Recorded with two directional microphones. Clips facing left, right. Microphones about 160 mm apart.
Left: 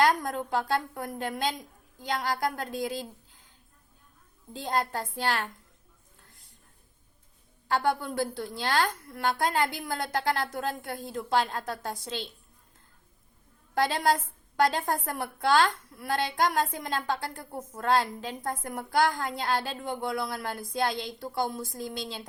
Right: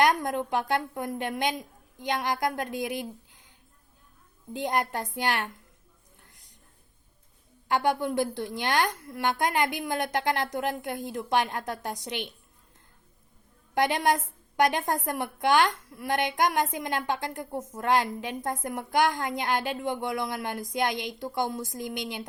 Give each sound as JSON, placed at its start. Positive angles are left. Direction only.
{"t": 0.0, "sound": "a woman's voice", "side_deg": -20}
{"t": 4.5, "sound": "a woman's voice", "side_deg": -20}
{"t": 6.2, "sound": "a sound", "side_deg": -20}
{"t": 7.7, "sound": "a woman's voice", "side_deg": -20}
{"t": 13.7, "sound": "a woman's voice", "side_deg": -20}